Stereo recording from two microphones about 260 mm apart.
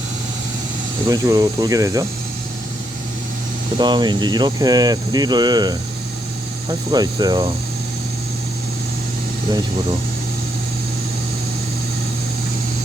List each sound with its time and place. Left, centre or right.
1.0 s speech: centre
3.8 s speech: centre